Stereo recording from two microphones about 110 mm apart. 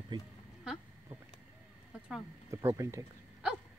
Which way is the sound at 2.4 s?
25° right (ahead or behind).